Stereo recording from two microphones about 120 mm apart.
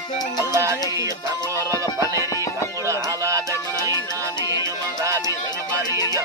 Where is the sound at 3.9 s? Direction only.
35° left (ahead or behind).